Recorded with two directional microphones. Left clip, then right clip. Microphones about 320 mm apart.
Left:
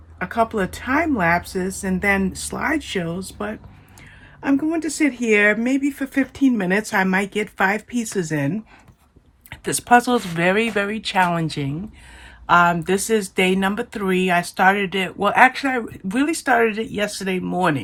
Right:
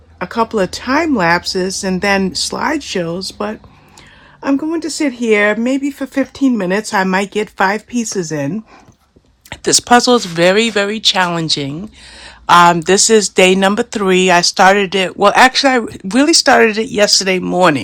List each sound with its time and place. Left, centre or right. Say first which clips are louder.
0.2 s speech: right 5 dB; centre